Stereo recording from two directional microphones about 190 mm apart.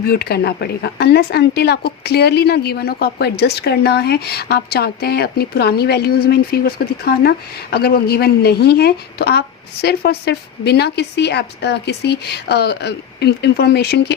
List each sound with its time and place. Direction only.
0.0 s speech: 55° left (ahead or behind)